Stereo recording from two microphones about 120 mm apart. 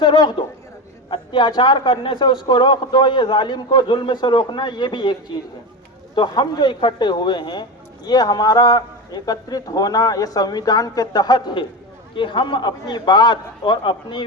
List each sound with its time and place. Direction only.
0.0 s speech: 40° left (ahead or behind)
6.1 s speech: 35° left (ahead or behind)